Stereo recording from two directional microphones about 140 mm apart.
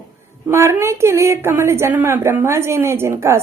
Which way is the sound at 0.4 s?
20° right (ahead or behind).